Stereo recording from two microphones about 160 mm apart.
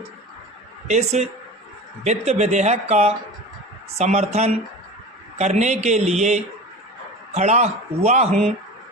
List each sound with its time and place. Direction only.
0.9 s speech: 45° right (ahead or behind)